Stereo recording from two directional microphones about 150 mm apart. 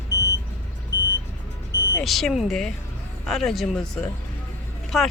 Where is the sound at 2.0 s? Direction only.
Centre (ahead or behind).